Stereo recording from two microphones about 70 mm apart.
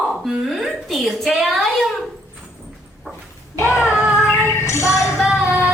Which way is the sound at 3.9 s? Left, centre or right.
Centre.